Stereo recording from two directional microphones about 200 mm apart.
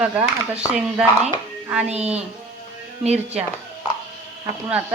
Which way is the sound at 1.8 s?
30° right (ahead or behind).